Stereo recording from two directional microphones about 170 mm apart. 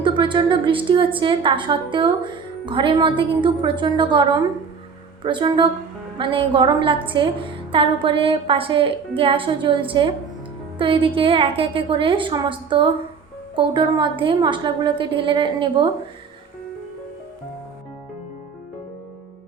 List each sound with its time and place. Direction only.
0.0 s a woman's voice: 30° right (ahead or behind)